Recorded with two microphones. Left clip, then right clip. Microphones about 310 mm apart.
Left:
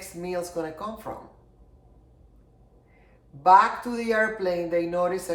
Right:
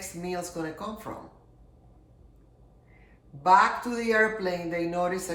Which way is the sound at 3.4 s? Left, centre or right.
Centre.